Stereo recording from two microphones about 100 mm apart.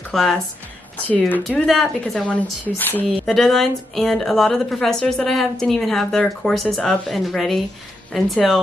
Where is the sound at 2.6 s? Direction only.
20° left (ahead or behind).